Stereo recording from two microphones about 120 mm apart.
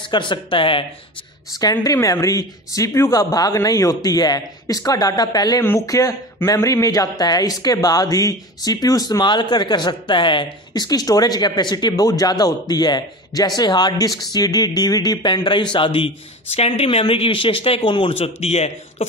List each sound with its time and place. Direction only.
0.1 s a man's voice: 40° left (ahead or behind)
1.6 s speech: 30° left (ahead or behind)
5.6 s a man's voice: 25° left (ahead or behind); by 19.0 s 65° left (ahead or behind)